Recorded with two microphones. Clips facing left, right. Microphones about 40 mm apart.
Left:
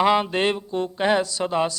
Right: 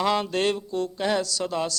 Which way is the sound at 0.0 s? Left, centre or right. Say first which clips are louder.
Left 4 dB; left.